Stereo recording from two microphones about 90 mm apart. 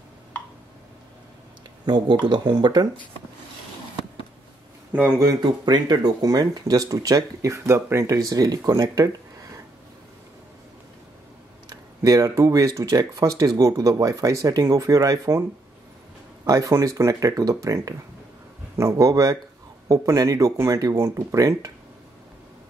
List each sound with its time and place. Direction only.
2.2 s speech: 55° right (ahead or behind)
4.9 s speech: 20° right (ahead or behind)
5.4 s speech: 50° right (ahead or behind); by 8.2 s 30° right (ahead or behind)
8.2 s speech: 45° right (ahead or behind)
12.0 s speech: 40° right (ahead or behind)
16.4 s speech: 35° right (ahead or behind)